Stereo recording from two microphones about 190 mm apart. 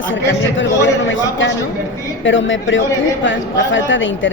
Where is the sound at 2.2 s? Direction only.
80° left.